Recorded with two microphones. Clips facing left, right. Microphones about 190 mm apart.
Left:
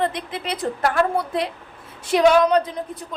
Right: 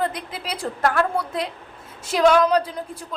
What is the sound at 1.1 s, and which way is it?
Speech, 25° left (ahead or behind).